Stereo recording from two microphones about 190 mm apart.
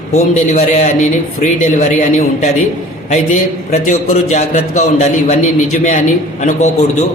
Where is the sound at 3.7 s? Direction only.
35° left (ahead or behind).